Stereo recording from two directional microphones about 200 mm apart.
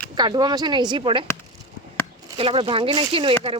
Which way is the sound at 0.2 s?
20° right (ahead or behind).